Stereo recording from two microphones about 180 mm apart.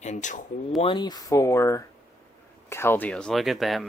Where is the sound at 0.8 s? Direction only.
25° left (ahead or behind).